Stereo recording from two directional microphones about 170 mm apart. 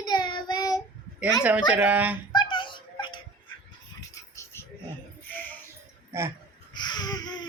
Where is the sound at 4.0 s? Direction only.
15° left (ahead or behind).